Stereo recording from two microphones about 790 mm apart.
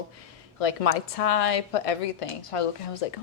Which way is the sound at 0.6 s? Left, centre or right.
Left.